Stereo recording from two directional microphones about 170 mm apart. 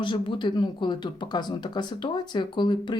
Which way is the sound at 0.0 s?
30° left (ahead or behind).